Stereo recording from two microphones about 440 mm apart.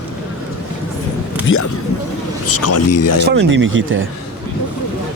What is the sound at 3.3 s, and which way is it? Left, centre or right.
Speech, right.